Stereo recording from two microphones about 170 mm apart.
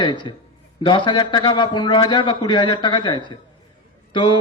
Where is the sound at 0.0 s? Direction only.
25° left (ahead or behind).